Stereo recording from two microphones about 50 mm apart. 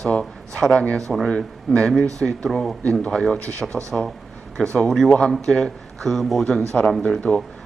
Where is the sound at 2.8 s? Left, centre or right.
Left.